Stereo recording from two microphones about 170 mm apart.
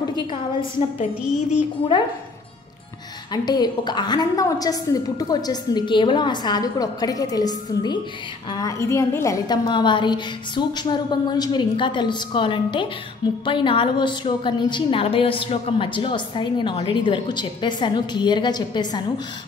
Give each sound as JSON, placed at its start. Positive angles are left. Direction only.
{"t": 3.4, "sound": "a woman's voice", "side_deg": 25}